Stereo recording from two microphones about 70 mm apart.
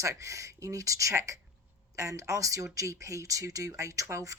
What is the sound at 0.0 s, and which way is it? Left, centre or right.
Speech, right.